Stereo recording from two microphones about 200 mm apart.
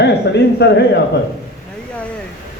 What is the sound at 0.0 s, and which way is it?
Speech, 55° left (ahead or behind).